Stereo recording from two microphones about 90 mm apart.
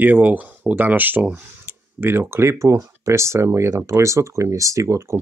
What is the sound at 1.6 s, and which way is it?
Speech, 25° right (ahead or behind).